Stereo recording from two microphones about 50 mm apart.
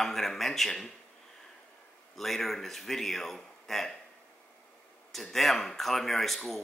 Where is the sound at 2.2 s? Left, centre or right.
Centre.